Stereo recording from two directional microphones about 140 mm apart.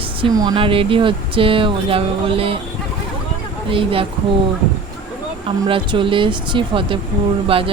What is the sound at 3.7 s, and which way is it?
Speech, 40° right (ahead or behind).